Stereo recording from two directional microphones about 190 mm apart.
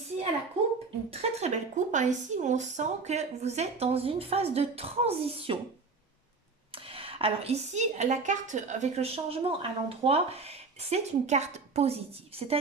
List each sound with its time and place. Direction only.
1.1 s speech: 35° right (ahead or behind)
6.9 s speech: 30° right (ahead or behind)